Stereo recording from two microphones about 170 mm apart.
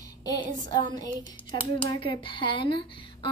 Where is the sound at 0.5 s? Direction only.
20° left (ahead or behind).